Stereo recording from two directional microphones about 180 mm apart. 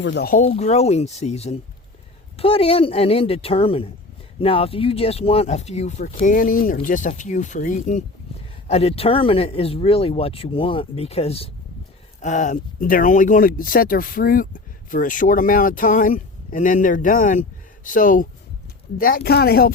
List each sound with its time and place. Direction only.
0.0 s speech: 75° left (ahead or behind)
0.3 s speech: 40° left (ahead or behind); by 19.7 s 60° left (ahead or behind)